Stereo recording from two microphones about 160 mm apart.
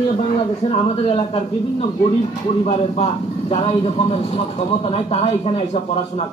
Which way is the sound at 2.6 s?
40° left (ahead or behind).